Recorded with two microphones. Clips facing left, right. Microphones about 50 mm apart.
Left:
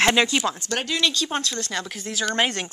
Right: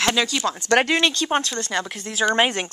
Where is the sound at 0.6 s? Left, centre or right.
Right.